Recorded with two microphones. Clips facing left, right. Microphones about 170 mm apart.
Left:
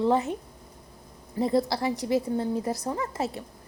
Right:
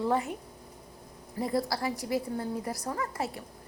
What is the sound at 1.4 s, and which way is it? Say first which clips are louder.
A woman's voice: left 5 dB; 25° left (ahead or behind).